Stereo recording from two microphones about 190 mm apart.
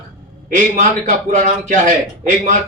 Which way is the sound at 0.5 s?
45° right (ahead or behind).